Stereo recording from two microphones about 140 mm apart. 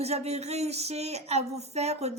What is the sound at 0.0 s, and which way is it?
Speech, 50° right (ahead or behind).